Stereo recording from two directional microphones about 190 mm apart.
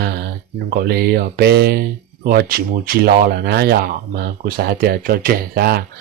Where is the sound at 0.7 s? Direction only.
55° right (ahead or behind).